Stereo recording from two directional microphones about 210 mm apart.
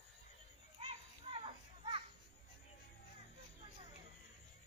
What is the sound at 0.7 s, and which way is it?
Children playing, 30° right (ahead or behind).